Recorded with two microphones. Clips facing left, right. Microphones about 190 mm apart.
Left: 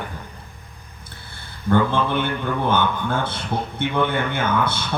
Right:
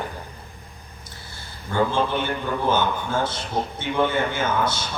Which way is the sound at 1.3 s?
60° left (ahead or behind).